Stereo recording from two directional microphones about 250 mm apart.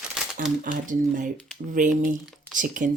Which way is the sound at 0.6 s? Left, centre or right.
Right.